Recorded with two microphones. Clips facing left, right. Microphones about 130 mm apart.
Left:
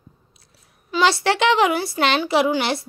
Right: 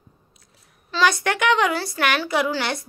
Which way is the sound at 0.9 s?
25° left (ahead or behind).